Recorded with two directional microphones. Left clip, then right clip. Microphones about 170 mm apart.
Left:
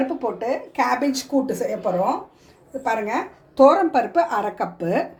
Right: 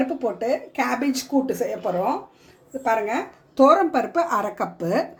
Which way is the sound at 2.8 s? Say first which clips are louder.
Right 1 dB; 40° right (ahead or behind).